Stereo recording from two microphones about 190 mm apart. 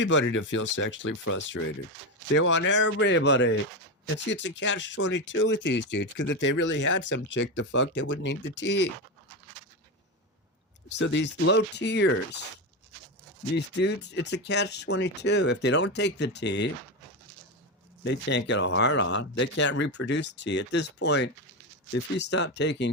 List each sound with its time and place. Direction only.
0.0 s speech: 75° left (ahead or behind); by 1.4 s 90° left
2.4 s speech: 75° left (ahead or behind)
10.8 s speech: 70° left (ahead or behind)
13.6 s speech: 65° left (ahead or behind)
18.0 s speech: 65° left (ahead or behind)